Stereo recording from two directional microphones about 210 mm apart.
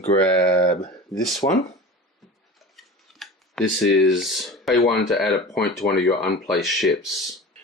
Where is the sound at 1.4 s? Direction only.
30° left (ahead or behind).